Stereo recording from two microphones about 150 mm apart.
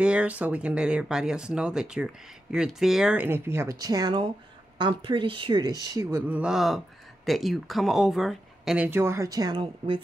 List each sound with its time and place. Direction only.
0.0 s speech: 10° right (ahead or behind); by 10.0 s 35° right (ahead or behind)